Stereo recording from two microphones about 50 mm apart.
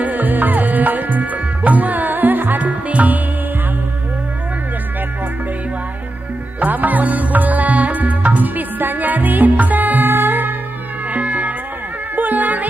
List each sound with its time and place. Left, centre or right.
0.0 s music: right
6.6 s music: right
11.1 s cat: right
12.2 s music: right